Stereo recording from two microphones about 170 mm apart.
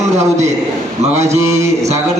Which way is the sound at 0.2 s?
40° right (ahead or behind).